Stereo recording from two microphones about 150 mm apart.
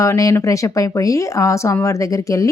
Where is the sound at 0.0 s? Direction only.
20° left (ahead or behind).